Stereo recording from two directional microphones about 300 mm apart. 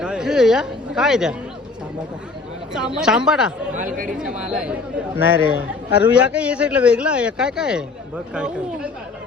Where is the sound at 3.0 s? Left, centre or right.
Centre.